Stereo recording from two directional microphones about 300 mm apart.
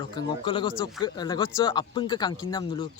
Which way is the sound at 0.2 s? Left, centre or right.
Centre.